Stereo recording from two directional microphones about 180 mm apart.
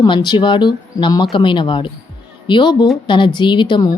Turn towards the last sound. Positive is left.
turn(degrees=25)  # may be behind; listen again after turning